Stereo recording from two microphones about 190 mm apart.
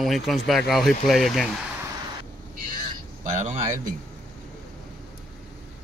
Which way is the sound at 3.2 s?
40° right (ahead or behind).